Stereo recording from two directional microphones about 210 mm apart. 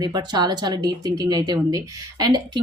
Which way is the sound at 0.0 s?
20° right (ahead or behind).